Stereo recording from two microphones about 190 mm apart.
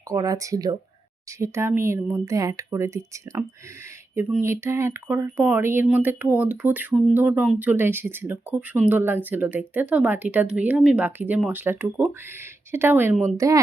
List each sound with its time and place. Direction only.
0.1 s speech: 20° right (ahead or behind)
4.1 s a sound: 10° right (ahead or behind)
4.4 s speech: 15° right (ahead or behind)